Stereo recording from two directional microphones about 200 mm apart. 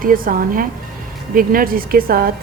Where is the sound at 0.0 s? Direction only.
45° right (ahead or behind).